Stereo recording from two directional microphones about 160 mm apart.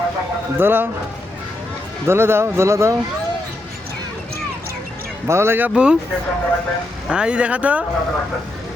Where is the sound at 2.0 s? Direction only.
15° right (ahead or behind).